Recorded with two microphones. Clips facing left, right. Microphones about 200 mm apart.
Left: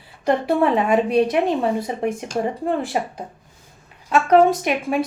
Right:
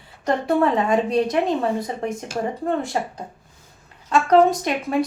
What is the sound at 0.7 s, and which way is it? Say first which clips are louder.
Speech: left 2 dB; 10° left (ahead or behind).